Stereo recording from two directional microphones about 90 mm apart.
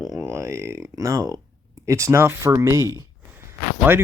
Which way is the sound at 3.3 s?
25° right (ahead or behind).